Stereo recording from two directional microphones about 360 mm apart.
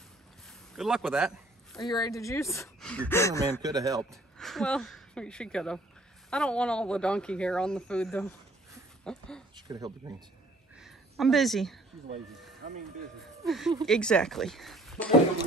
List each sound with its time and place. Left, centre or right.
0.5 s a sound: centre
2.0 s speech: centre
3.6 s speech: centre
4.0 s a woman's voice: centre
9.7 s speech: centre
10.8 s a woman's voice: centre
12.6 s speech: centre
13.4 s speech: centre